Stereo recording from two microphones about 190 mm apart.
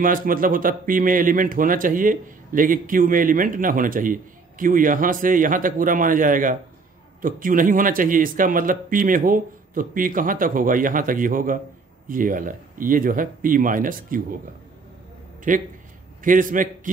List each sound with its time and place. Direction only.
0.0 s a man's voice: 45° right (ahead or behind)
15.5 s a man's voice: 45° right (ahead or behind)